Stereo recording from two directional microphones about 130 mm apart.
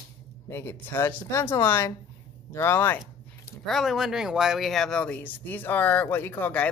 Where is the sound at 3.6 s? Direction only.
Centre (ahead or behind).